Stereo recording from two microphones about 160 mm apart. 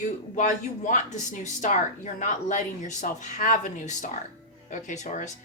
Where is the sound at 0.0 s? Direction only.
50° left (ahead or behind).